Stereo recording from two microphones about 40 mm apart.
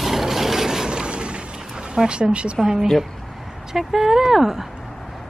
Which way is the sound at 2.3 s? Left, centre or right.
Right.